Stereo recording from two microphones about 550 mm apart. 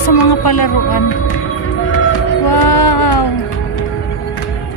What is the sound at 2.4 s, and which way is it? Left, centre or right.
Music, left.